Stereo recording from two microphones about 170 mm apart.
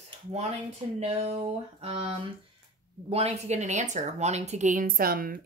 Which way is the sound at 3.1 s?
40° right (ahead or behind).